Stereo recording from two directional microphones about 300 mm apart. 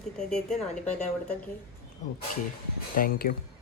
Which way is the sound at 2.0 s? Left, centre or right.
Left.